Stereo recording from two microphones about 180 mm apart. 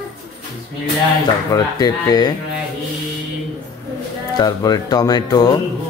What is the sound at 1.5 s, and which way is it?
Speech, 20° left (ahead or behind).